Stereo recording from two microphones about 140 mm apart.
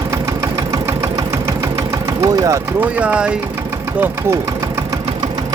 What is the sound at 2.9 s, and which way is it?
Speech, 10° right (ahead or behind).